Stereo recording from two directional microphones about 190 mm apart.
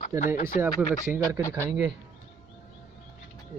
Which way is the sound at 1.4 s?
15° left (ahead or behind).